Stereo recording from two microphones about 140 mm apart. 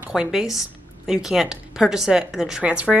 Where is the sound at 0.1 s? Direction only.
5° right (ahead or behind).